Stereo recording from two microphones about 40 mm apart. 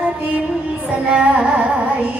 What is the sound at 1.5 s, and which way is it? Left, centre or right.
Music, right.